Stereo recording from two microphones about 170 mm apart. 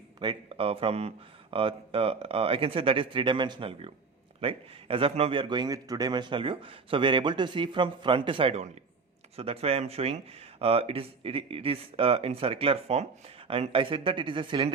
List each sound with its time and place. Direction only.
0.2 s a man's voice: 30° right (ahead or behind)